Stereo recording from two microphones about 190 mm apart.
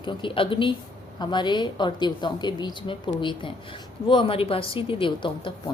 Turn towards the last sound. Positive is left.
turn(degrees=25)  # may be behind; listen again after turning